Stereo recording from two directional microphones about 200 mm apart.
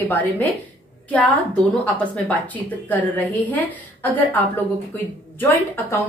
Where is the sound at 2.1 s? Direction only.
5° left (ahead or behind).